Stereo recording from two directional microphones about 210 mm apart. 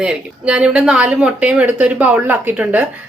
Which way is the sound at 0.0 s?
5° right (ahead or behind).